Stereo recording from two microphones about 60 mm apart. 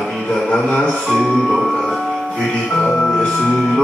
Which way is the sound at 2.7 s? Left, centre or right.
Centre.